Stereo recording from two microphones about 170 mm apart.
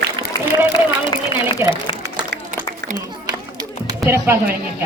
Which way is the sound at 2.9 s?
25° right (ahead or behind).